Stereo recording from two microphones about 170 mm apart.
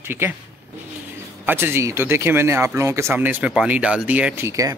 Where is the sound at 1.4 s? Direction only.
15° right (ahead or behind).